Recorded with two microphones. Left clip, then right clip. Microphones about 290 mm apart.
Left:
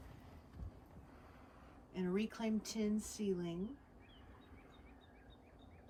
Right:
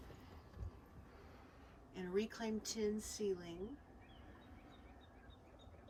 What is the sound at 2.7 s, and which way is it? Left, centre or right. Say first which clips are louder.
Speech: even; left.